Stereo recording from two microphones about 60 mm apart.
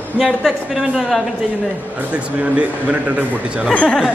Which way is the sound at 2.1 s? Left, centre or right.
Right.